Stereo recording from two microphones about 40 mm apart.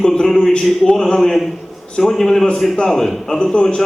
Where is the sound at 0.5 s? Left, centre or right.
Left.